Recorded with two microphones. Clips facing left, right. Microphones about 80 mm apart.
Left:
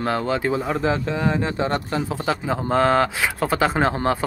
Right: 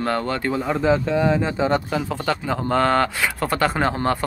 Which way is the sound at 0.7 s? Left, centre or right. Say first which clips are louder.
Right 3 dB; centre.